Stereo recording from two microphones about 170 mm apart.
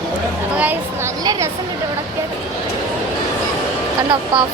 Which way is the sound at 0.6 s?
10° right (ahead or behind).